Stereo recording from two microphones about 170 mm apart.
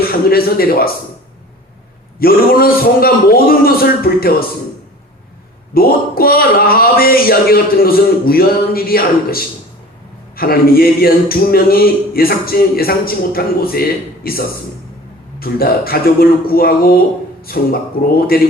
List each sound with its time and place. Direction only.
0.1 s a man's voice: 60° left (ahead or behind)
2.1 s a man's voice: 60° left (ahead or behind)
5.7 s a man's voice: 60° left (ahead or behind)